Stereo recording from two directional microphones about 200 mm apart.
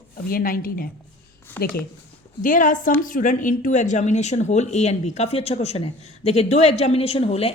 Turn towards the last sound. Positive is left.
turn(degrees=30)  # may be behind; listen again after turning